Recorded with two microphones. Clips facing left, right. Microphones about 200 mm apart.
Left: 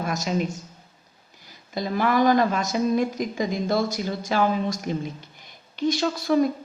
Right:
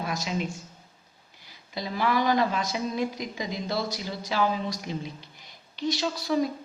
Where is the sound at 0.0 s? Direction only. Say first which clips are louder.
Left 5 dB; 45° left (ahead or behind).